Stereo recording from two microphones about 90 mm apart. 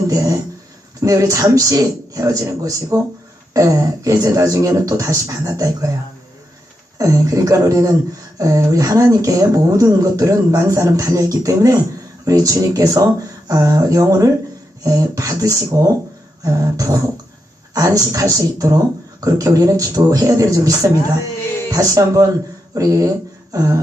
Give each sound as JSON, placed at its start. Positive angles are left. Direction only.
{"t": 0.1, "sound": "speech", "side_deg": -40}
{"t": 7.0, "sound": "speech", "side_deg": -35}